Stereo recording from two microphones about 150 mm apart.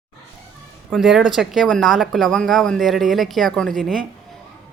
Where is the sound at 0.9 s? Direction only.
5° right (ahead or behind).